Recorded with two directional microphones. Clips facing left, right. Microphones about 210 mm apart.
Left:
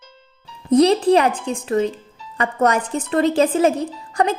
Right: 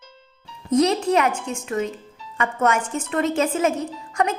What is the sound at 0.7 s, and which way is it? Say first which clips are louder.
A woman's voice: left 5 dB; 35° left (ahead or behind).